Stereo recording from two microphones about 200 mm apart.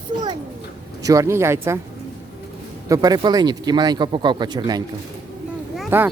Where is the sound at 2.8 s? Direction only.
20° right (ahead or behind).